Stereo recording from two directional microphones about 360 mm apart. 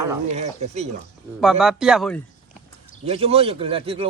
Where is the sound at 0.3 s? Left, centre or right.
Centre.